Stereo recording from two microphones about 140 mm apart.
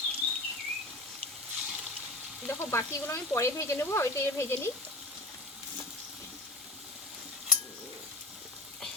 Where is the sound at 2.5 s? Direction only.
20° left (ahead or behind).